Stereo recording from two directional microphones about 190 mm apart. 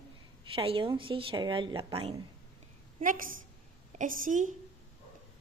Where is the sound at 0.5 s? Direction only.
30° right (ahead or behind).